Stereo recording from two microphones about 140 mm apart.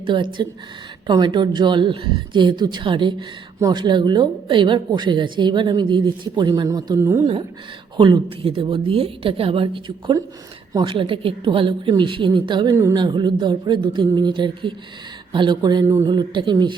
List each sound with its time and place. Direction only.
0.0 s a woman's voice: 35° right (ahead or behind)
7.9 s a woman's voice: 35° right (ahead or behind)